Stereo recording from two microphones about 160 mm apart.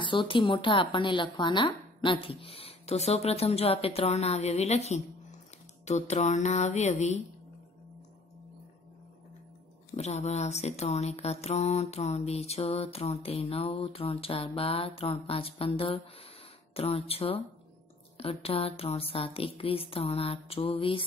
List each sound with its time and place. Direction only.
0.0 s speech: 30° left (ahead or behind)
9.9 s speech: 45° left (ahead or behind)